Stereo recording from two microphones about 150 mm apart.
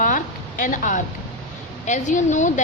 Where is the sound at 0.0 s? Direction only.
60° left (ahead or behind).